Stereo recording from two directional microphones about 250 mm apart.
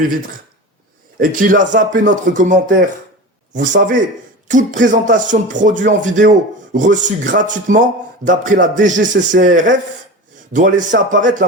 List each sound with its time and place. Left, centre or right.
1.2 s a man's voice: right